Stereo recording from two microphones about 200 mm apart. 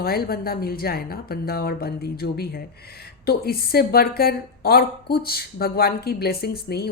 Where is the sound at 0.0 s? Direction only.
50° left (ahead or behind).